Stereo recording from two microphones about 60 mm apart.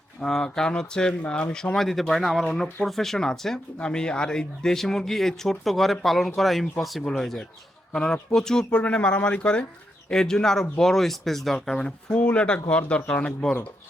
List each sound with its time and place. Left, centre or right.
0.2 s speech: centre
1.7 s speech: centre
8.7 s speech: left